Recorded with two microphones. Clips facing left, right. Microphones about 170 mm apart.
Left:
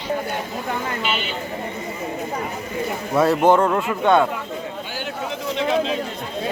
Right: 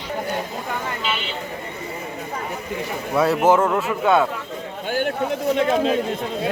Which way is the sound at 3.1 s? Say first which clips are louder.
Left 1 dB; centre (ahead or behind).